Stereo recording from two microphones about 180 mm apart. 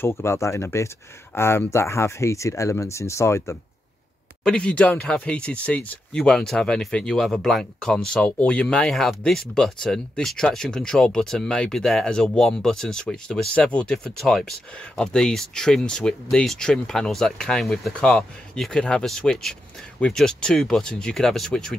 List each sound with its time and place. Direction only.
0.0 s speech: 15° left (ahead or behind)